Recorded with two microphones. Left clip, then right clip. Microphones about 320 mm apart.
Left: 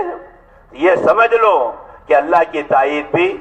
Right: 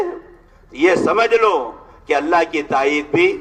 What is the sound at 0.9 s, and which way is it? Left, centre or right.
Speech, right.